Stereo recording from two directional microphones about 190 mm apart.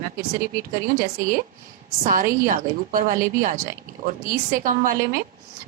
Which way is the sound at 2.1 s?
45° right (ahead or behind).